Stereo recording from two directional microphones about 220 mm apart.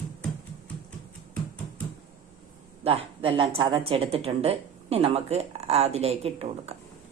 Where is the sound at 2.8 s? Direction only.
25° right (ahead or behind).